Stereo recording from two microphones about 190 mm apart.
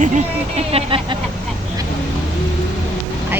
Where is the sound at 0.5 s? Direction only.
30° right (ahead or behind).